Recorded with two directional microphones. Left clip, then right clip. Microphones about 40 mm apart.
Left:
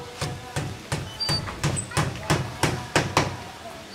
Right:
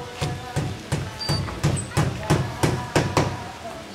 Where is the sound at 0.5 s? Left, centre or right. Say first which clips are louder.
Right 2 dB; left.